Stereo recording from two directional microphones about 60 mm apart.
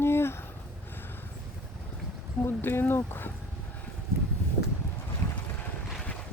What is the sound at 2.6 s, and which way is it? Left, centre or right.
Speech, left.